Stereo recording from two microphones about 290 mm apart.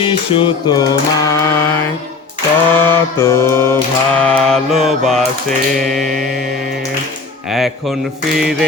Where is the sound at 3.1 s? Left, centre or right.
Centre.